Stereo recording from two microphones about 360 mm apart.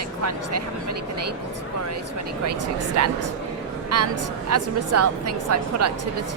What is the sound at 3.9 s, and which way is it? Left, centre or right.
A woman's voice, right.